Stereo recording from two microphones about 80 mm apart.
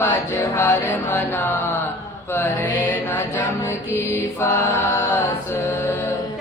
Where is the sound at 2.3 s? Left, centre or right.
Left.